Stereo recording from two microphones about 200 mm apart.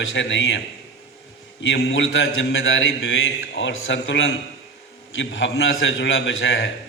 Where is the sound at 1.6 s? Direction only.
75° left (ahead or behind).